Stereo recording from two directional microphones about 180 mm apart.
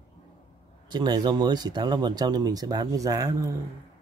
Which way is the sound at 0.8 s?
25° right (ahead or behind).